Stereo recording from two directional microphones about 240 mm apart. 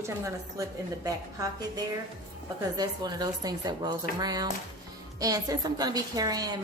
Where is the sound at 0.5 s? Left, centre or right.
Centre.